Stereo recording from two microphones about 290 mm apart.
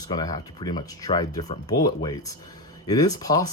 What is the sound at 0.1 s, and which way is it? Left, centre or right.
Speech, centre.